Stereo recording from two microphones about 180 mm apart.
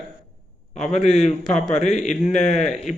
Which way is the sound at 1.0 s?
Centre (ahead or behind).